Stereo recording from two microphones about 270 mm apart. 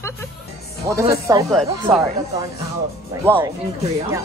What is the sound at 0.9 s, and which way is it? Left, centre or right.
Speech, centre.